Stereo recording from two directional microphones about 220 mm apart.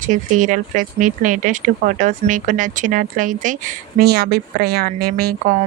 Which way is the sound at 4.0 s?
45° right (ahead or behind).